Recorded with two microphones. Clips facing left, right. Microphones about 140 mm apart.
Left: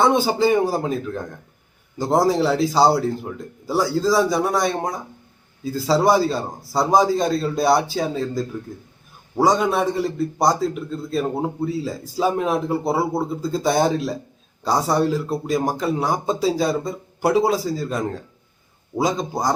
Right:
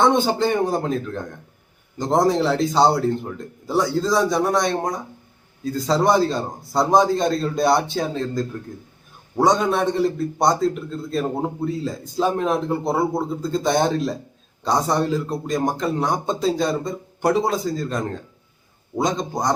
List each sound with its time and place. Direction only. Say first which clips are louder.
0.0 s a man's voice: left 1 dB; 5° left (ahead or behind)